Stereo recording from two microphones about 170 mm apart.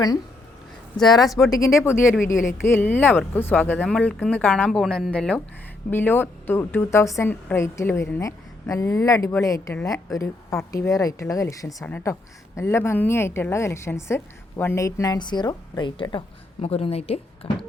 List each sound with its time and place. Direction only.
1.2 s speech: centre (ahead or behind)
1.5 s a woman's voice: 20° left (ahead or behind); by 17.5 s 35° left (ahead or behind)